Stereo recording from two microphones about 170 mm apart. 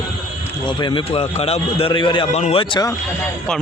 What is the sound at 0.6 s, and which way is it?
A man's voice, 25° left (ahead or behind).